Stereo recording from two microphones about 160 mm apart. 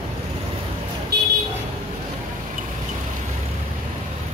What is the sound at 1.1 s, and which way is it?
Vehicle, 85° right.